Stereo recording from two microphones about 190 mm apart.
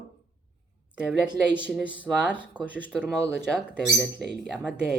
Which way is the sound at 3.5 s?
Centre (ahead or behind).